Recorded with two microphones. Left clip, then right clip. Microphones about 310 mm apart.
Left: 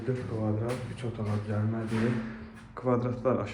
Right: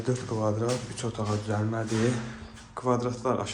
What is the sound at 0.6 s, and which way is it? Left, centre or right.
Speech, centre.